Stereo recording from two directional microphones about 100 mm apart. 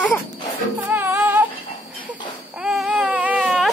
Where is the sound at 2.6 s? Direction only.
5° right (ahead or behind).